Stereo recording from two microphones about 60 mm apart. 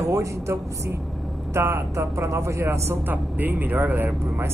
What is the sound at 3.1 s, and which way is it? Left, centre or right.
Speech, right.